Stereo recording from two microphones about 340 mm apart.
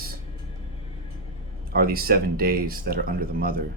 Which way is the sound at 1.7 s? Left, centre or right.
Right.